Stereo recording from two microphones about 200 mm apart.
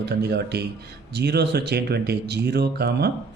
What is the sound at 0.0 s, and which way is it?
A man's voice, 55° right (ahead or behind).